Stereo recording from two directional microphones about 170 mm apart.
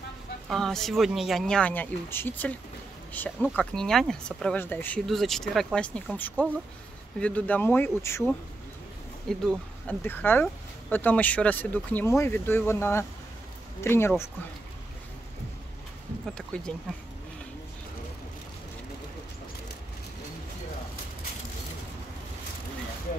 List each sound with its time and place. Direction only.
0.5 s speech: centre (ahead or behind)
9.5 s speech: 10° left (ahead or behind)
16.3 s speech: 5° left (ahead or behind)